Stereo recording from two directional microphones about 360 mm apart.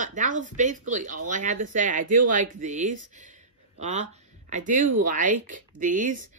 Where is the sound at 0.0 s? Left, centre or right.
Right.